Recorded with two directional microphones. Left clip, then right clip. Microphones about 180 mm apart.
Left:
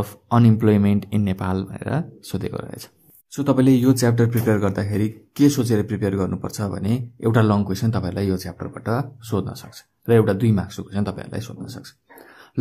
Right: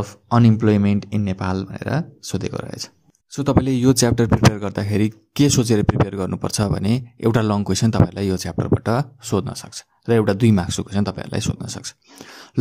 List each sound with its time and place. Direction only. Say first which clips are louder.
0.0 s speech: right 1 dB; 5° right (ahead or behind)
3.3 s speech: left 2 dB; 35° right (ahead or behind)